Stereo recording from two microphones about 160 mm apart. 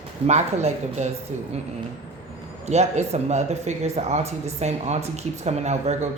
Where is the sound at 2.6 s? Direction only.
45° right (ahead or behind).